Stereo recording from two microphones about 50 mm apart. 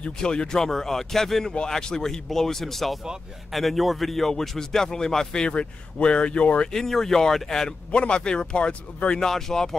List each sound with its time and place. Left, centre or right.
0.2 s speech: centre
6.7 s speech: centre
7.9 s speech: left
9.2 s speech: centre